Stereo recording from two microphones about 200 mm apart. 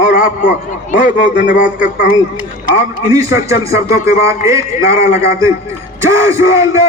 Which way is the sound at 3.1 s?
15° right (ahead or behind).